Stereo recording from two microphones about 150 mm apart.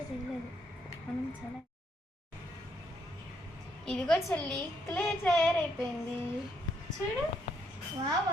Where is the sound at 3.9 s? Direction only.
5° left (ahead or behind).